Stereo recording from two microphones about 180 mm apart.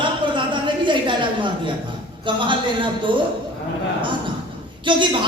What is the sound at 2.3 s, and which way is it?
Speech, 25° right (ahead or behind).